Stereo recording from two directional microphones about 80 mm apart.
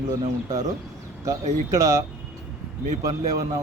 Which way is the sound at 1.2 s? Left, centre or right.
Right.